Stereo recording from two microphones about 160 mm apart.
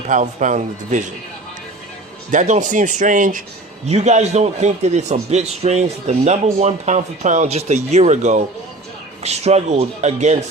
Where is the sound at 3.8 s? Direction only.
45° right (ahead or behind).